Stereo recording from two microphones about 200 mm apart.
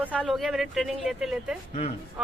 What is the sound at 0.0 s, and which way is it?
Speech, 5° right (ahead or behind).